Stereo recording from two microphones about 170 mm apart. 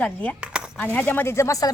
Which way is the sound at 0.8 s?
10° left (ahead or behind).